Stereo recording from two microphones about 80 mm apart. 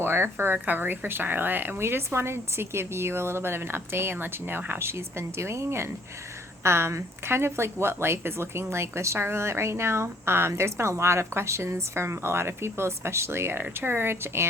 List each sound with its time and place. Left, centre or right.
0.0 s a woman's voice: right